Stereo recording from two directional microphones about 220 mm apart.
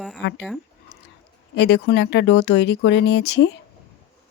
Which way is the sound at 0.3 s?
Centre (ahead or behind).